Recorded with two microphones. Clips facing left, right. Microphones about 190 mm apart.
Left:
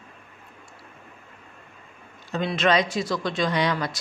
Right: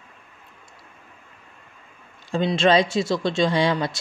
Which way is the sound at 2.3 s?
30° right (ahead or behind).